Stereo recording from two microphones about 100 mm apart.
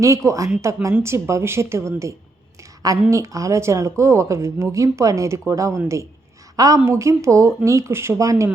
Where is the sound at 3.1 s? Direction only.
35° right (ahead or behind).